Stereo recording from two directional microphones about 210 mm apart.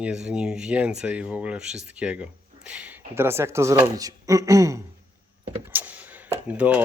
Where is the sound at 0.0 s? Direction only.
5° right (ahead or behind).